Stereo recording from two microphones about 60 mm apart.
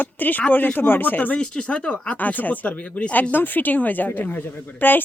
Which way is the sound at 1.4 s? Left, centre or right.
Centre.